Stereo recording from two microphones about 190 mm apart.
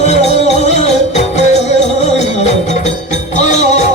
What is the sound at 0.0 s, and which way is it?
Music, 35° left (ahead or behind).